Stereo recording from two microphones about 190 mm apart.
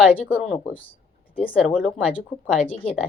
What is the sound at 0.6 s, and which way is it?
Speech, 10° left (ahead or behind).